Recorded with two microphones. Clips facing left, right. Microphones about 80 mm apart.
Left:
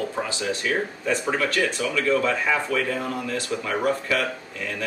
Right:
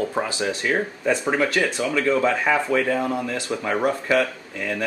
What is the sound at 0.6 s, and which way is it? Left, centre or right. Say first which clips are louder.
Speech: right 2 dB; right.